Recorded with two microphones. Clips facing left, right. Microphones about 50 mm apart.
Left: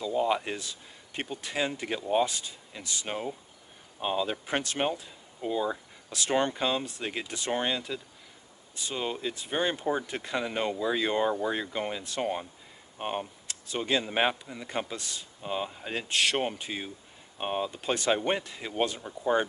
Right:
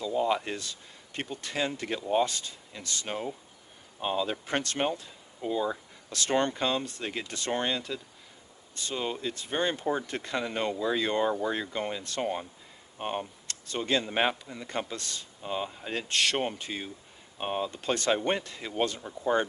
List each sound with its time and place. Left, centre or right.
0.0 s speech: centre